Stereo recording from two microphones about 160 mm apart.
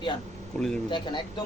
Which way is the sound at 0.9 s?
30° left (ahead or behind).